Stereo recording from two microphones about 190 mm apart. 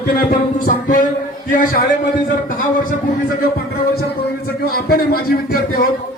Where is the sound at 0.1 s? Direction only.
50° left (ahead or behind).